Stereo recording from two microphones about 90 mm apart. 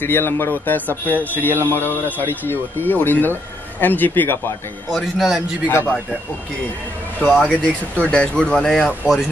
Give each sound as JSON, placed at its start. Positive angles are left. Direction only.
{"t": 0.0, "sound": "speech", "side_deg": 25}
{"t": 4.9, "sound": "a man's voice", "side_deg": -5}
{"t": 5.7, "sound": "speech", "side_deg": 25}
{"t": 7.6, "sound": "speech", "side_deg": 15}